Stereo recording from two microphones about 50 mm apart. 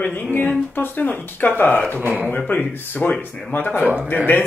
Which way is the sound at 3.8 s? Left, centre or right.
Right.